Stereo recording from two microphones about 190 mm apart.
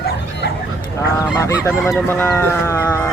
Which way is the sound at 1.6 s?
15° left (ahead or behind).